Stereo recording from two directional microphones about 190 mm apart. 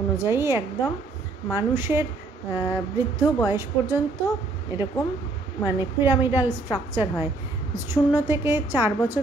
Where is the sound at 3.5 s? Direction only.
15° right (ahead or behind).